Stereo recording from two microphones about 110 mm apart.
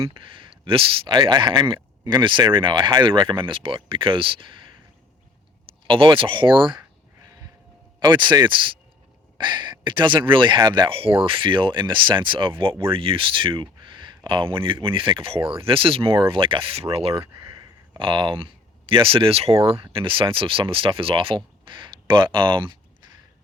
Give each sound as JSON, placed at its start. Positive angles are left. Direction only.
{"t": 0.0, "sound": "speech", "side_deg": -50}
{"t": 5.9, "sound": "speech", "side_deg": -50}
{"t": 7.9, "sound": "speech", "side_deg": -45}
{"t": 17.9, "sound": "speech", "side_deg": -45}